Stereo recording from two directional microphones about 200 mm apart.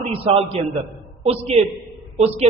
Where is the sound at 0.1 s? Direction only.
30° right (ahead or behind).